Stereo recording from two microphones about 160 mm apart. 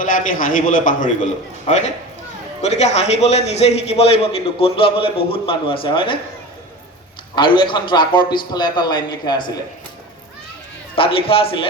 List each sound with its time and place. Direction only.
0.0 s a man's voice: 60° left (ahead or behind); by 6.1 s 30° left (ahead or behind)
7.3 s a man's voice: 30° left (ahead or behind)
10.9 s a man's voice: 35° left (ahead or behind)